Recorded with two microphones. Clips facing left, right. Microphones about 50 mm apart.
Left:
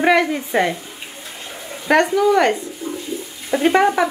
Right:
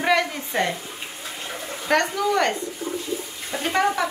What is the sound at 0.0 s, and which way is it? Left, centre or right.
Speech, centre.